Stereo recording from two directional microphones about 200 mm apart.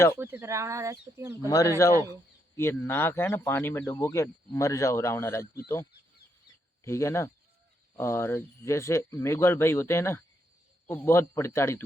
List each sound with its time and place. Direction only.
0.2 s speech: 10° right (ahead or behind)
1.5 s speech: 15° left (ahead or behind)
1.9 s speech: 15° right (ahead or behind)
2.6 s speech: 10° left (ahead or behind)
6.8 s speech: 15° left (ahead or behind)